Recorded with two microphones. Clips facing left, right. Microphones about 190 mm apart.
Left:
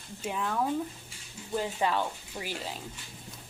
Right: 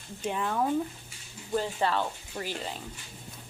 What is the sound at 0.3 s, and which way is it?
Speech, centre (ahead or behind).